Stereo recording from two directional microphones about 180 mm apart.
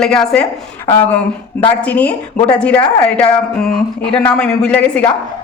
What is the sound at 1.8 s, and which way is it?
A woman's voice, 10° left (ahead or behind).